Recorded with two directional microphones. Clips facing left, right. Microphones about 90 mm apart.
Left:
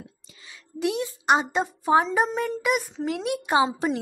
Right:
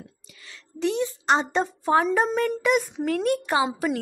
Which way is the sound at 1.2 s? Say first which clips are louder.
Left 1 dB; 10° left (ahead or behind).